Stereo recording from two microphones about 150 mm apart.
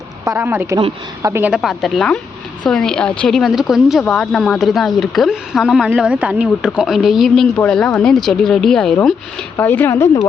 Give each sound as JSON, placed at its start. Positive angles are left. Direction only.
{"t": 0.3, "sound": "speech", "side_deg": -15}